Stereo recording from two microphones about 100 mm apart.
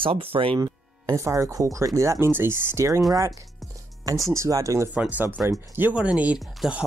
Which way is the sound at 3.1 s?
40° right (ahead or behind).